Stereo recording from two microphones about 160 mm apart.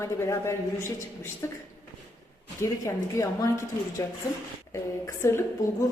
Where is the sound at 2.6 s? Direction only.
20° left (ahead or behind).